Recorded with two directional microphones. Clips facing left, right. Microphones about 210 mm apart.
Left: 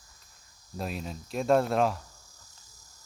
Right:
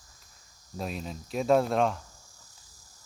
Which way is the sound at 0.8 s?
Centre (ahead or behind).